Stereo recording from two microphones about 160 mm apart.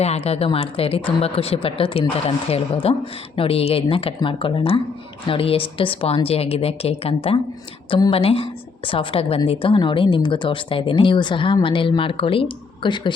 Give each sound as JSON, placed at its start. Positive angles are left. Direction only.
{"t": 0.0, "sound": "a woman's voice", "side_deg": 40}